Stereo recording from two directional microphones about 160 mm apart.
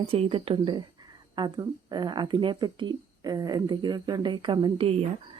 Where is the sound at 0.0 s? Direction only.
35° right (ahead or behind).